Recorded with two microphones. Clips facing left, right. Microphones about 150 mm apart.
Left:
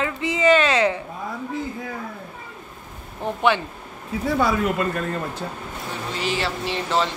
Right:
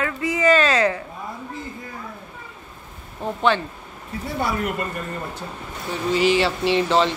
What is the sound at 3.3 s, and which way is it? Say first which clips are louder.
Speech: even; 15° left (ahead or behind).